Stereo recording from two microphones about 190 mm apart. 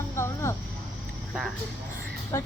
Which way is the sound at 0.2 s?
15° left (ahead or behind).